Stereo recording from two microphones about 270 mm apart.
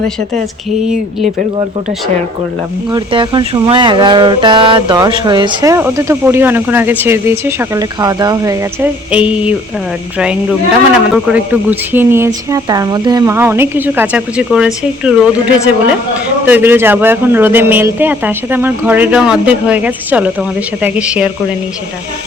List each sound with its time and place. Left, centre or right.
1.2 s speech: right
2.9 s speech: centre
11.1 s a woman's voice: centre